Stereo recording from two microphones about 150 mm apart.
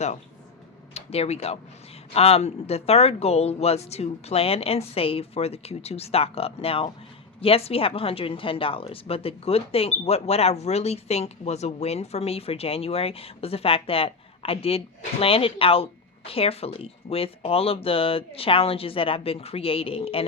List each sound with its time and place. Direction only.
0.9 s a woman's voice: 45° left (ahead or behind)